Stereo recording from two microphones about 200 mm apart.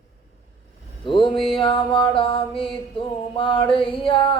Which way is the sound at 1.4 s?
25° left (ahead or behind).